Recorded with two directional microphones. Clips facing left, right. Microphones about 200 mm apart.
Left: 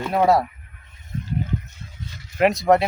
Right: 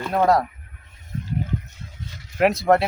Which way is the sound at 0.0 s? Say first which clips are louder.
Left 1 dB; 5° left (ahead or behind).